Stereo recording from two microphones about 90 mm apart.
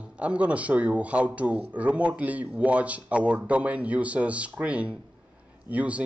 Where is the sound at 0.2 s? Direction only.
15° right (ahead or behind).